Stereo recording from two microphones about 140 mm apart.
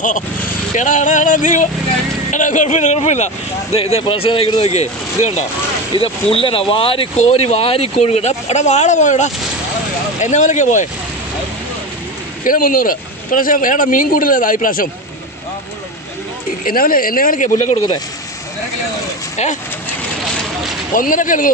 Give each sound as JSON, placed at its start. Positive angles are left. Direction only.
{"t": 0.8, "sound": "speech", "side_deg": 65}
{"t": 4.5, "sound": "speech", "side_deg": 50}
{"t": 6.3, "sound": "speech", "side_deg": 40}
{"t": 12.5, "sound": "speech", "side_deg": 90}
{"t": 16.6, "sound": "speech", "side_deg": 90}
{"t": 20.9, "sound": "speech", "side_deg": 75}